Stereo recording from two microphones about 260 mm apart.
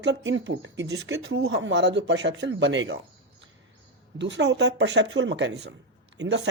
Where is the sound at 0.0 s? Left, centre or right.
Right.